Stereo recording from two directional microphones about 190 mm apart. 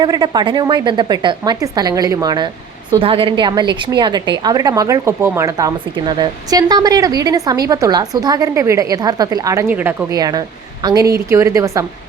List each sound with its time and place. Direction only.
0.0 s a woman's voice: 20° right (ahead or behind)